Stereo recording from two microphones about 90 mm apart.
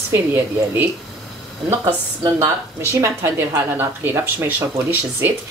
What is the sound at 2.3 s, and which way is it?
Speech, 30° right (ahead or behind).